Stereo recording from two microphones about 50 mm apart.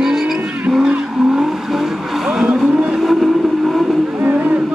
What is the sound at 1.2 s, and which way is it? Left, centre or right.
Vehicle, centre.